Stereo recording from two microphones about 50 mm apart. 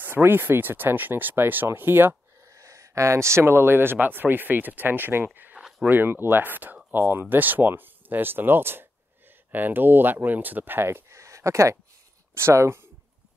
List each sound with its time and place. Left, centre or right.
0.0 s speech: right
2.5 s speech: right
5.6 s a sound: centre
5.9 s speech: right
10.9 s a sound: right
12.4 s speech: right